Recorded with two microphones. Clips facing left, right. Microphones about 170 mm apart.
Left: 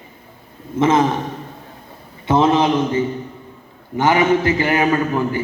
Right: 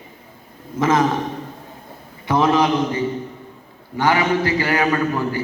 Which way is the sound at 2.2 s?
25° left (ahead or behind).